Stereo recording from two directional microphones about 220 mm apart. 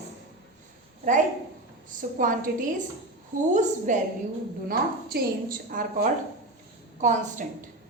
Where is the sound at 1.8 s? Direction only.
35° right (ahead or behind).